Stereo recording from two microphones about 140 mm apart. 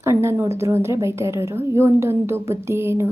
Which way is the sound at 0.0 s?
20° right (ahead or behind).